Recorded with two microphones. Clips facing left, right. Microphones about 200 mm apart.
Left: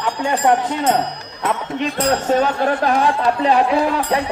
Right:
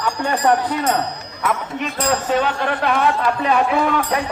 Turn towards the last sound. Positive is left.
turn(degrees=30)  # may be behind; listen again after turning